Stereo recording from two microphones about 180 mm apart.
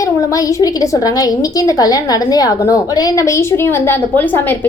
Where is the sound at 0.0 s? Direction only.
20° left (ahead or behind).